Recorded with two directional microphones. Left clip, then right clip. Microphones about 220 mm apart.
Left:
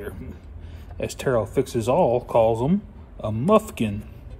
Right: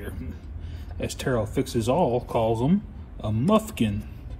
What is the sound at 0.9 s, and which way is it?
Speech, 30° left (ahead or behind).